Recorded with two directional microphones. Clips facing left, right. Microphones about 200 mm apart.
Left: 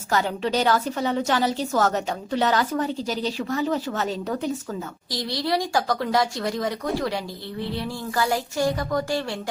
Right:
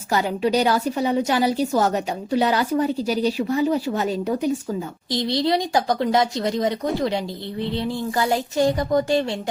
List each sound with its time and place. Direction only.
0.1 s a woman's voice: 10° right (ahead or behind)
5.1 s speech: 25° right (ahead or behind)